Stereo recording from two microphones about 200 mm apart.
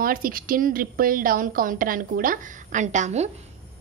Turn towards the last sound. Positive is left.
turn(degrees=-35)  # may be behind; listen again after turning